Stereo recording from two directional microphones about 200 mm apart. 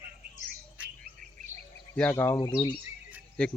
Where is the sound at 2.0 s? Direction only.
10° left (ahead or behind).